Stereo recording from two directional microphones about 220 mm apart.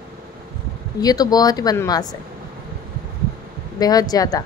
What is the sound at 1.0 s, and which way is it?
Speech, 15° left (ahead or behind).